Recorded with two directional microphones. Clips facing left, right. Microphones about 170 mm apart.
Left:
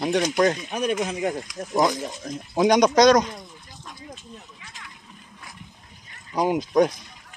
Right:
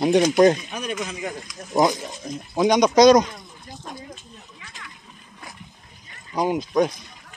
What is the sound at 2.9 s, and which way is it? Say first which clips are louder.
Speech: right 5 dB; 5° right (ahead or behind).